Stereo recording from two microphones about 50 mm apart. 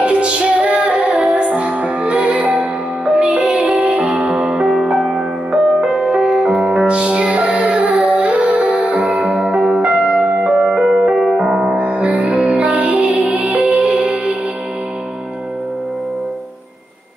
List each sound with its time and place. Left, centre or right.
0.0 s music: right
1.1 s music: centre
3.1 s music: centre
6.9 s music: centre
7.7 s music: right
9.3 s music: centre